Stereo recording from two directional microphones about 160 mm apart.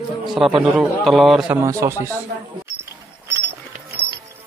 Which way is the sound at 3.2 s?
15° right (ahead or behind).